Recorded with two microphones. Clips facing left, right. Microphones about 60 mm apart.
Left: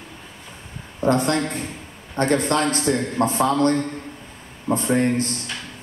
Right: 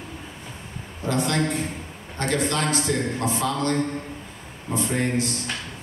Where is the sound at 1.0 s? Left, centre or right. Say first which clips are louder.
Left 4 dB; left.